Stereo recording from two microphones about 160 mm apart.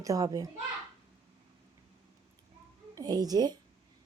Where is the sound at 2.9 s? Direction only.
25° right (ahead or behind).